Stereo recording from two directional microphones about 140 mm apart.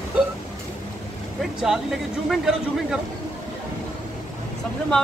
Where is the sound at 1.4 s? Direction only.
5° right (ahead or behind).